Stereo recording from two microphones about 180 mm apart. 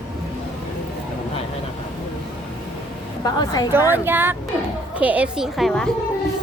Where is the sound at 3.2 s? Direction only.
20° left (ahead or behind).